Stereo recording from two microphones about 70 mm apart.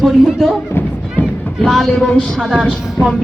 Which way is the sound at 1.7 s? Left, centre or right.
Centre.